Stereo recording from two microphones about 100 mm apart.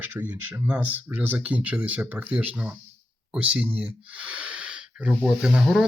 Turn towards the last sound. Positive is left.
turn(degrees=-5)  # may be behind; listen again after turning